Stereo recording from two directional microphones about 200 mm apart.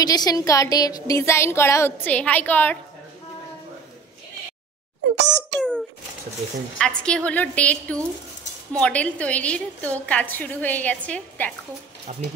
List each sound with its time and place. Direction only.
0.0 s speech: 20° left (ahead or behind)
5.1 s a child's voice: 60° right (ahead or behind)
6.8 s a woman's voice: 5° left (ahead or behind)
12.1 s speech: 35° right (ahead or behind)